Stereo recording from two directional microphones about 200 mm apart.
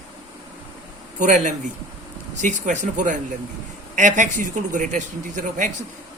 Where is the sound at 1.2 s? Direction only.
40° right (ahead or behind).